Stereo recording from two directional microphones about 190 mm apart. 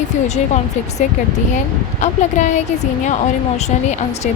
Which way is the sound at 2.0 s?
40° left (ahead or behind).